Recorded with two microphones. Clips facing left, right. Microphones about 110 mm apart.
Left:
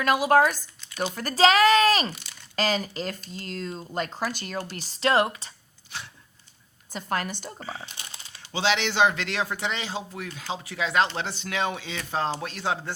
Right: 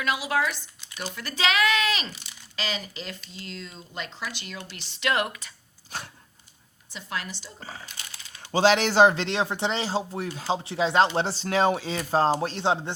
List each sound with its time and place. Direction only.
0.0 s speech: 45° left (ahead or behind); by 5.5 s 30° left (ahead or behind)
5.9 s speech: 40° right (ahead or behind)
6.9 s speech: 45° left (ahead or behind)
8.4 s speech: 45° right (ahead or behind); by 12.9 s 25° right (ahead or behind)